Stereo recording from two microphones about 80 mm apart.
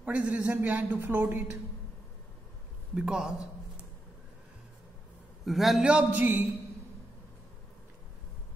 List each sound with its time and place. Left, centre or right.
0.0 s speech: centre
2.9 s a man's voice: centre
5.4 s a man's voice: centre
5.9 s a man's voice: centre